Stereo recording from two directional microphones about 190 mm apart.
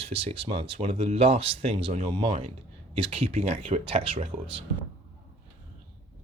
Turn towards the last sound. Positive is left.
turn(degrees=-30)  # may be behind; listen again after turning